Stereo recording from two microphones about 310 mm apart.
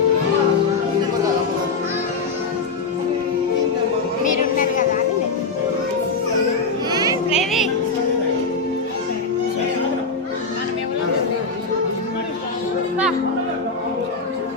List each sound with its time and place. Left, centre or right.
4.2 s a sound: left
6.9 s music: centre
7.3 s music: centre